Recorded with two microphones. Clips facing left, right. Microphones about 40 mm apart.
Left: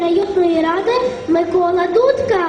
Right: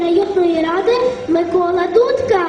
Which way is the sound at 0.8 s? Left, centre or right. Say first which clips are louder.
Right 2 dB; left.